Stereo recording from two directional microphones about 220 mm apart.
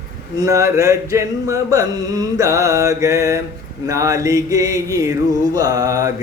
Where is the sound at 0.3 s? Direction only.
15° right (ahead or behind).